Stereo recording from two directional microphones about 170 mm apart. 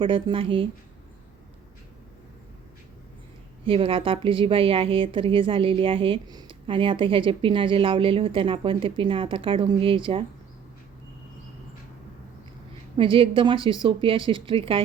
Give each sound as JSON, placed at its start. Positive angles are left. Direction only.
{"t": 0.0, "sound": "a woman's voice", "side_deg": -30}
{"t": 3.7, "sound": "a woman's voice", "side_deg": -30}
{"t": 13.0, "sound": "speech", "side_deg": -30}